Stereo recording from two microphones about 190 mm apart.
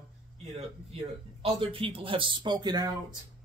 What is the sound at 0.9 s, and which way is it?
Speech, 30° right (ahead or behind).